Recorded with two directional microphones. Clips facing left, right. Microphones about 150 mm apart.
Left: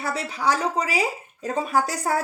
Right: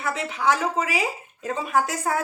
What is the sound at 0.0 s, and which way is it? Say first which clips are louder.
Speech: even; 35° left (ahead or behind).